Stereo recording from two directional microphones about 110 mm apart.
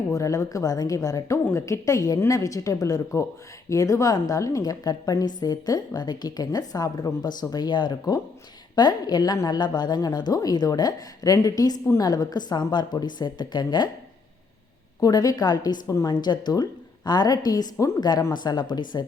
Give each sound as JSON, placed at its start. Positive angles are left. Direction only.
{"t": 0.1, "sound": "a woman's voice", "side_deg": 30}
{"t": 15.0, "sound": "a woman's voice", "side_deg": 35}